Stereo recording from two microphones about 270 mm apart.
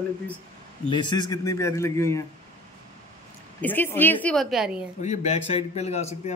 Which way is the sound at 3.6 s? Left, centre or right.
Centre.